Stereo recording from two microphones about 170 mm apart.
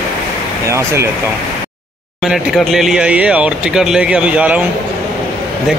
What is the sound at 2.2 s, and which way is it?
Speech, centre (ahead or behind).